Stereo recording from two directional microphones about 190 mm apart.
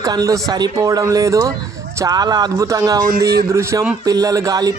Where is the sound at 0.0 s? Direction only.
20° right (ahead or behind).